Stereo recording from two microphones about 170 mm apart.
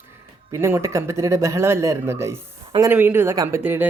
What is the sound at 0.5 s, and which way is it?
Speech, 15° right (ahead or behind).